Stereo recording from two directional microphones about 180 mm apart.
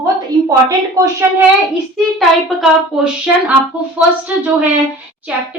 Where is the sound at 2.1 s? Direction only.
5° right (ahead or behind).